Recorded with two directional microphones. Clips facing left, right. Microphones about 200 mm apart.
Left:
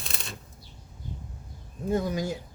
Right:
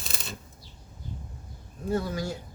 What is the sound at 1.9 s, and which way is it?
Speech, 15° left (ahead or behind).